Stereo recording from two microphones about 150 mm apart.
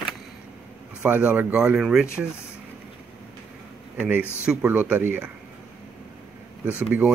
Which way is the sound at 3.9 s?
10° right (ahead or behind).